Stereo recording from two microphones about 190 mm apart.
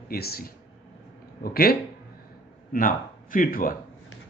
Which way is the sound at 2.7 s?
45° left (ahead or behind).